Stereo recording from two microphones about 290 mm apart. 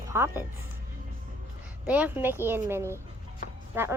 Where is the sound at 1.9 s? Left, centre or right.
Centre.